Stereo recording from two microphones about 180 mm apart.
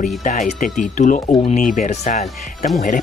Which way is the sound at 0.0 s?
45° left (ahead or behind).